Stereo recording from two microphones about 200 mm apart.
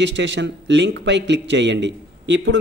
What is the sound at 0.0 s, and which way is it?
Speech, 65° right (ahead or behind).